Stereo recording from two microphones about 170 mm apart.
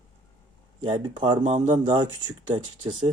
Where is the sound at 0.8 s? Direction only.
30° right (ahead or behind).